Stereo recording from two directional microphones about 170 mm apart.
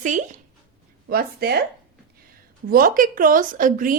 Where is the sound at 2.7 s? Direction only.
55° right (ahead or behind).